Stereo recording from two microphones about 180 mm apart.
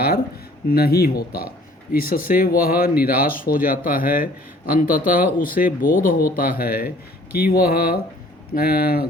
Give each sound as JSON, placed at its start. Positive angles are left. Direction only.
{"t": 0.7, "sound": "speech", "side_deg": 60}